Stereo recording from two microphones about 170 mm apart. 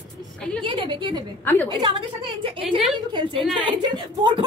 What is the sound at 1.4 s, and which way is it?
Speech, 10° left (ahead or behind).